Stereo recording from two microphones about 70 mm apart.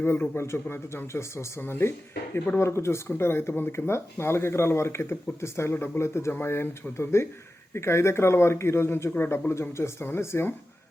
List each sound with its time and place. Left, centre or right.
0.3 s speech: left
9.5 s speech: left